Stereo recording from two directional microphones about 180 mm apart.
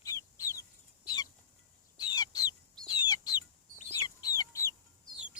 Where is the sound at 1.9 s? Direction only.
25° left (ahead or behind).